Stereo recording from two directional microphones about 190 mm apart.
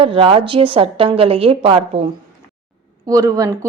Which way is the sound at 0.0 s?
30° right (ahead or behind).